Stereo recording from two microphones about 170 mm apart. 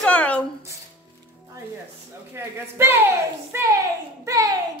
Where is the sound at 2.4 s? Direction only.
15° right (ahead or behind).